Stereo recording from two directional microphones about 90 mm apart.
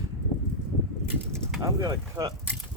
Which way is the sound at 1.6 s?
40° right (ahead or behind).